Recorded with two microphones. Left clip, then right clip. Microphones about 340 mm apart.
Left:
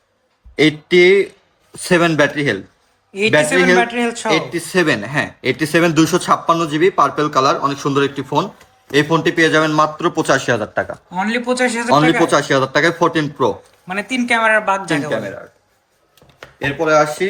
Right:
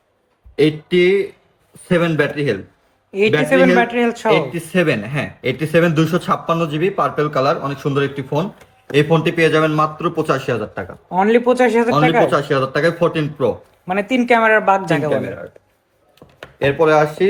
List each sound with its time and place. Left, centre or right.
0.5 s speech: left
3.1 s a man's voice: centre; by 10.8 s left
11.1 s speech: centre
11.9 s a man's voice: left
13.8 s speech: centre
16.4 s speech: centre